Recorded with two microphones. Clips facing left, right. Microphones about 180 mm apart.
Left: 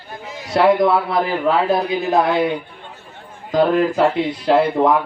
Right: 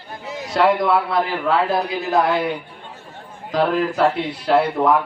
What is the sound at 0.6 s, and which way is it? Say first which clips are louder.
A man's voice: left 3 dB; 20° left (ahead or behind).